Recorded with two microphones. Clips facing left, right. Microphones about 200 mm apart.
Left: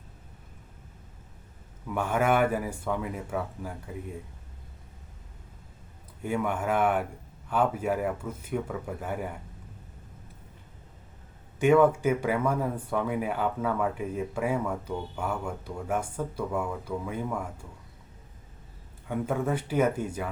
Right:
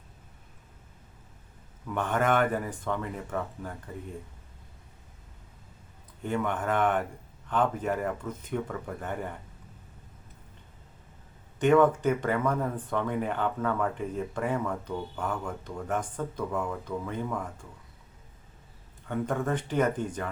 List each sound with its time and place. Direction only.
1.9 s speech: 10° left (ahead or behind)
6.2 s speech: 10° left (ahead or behind)
11.6 s speech: 10° left (ahead or behind)
19.0 s speech: 10° left (ahead or behind)